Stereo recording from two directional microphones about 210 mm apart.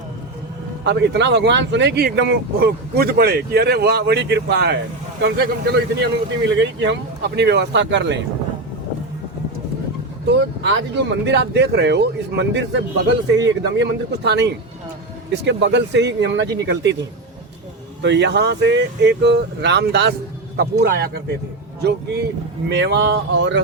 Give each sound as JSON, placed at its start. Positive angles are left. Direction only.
{"t": 0.9, "sound": "a man's voice", "side_deg": -55}
{"t": 10.2, "sound": "a man's voice", "side_deg": -55}
{"t": 18.0, "sound": "a man's voice", "side_deg": -55}